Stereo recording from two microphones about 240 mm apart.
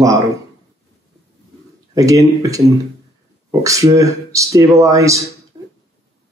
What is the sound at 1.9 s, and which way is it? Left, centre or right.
Speech, centre.